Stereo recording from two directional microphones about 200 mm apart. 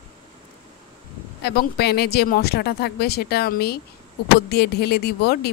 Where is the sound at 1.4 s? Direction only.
55° left (ahead or behind).